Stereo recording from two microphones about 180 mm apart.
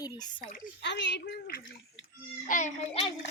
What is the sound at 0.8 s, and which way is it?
A child's voice, 75° left (ahead or behind).